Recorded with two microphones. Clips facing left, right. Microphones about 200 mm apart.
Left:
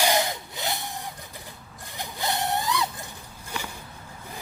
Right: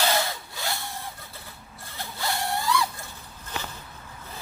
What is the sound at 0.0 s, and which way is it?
Wood, 15° left (ahead or behind).